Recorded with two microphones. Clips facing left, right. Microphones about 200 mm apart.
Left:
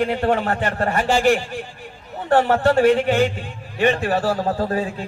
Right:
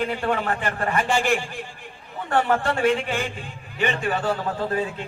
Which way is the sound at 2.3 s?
35° left (ahead or behind).